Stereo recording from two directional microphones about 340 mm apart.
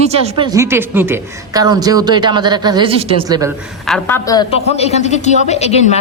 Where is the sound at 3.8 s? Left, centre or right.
Centre.